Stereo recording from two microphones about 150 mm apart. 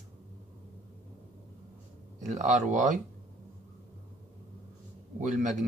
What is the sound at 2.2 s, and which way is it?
Speech, 55° right (ahead or behind).